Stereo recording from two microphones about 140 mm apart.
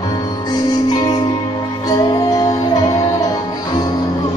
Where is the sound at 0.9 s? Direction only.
30° left (ahead or behind).